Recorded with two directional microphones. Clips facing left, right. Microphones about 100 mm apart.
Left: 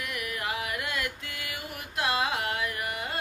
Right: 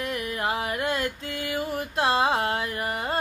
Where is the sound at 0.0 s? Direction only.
30° right (ahead or behind).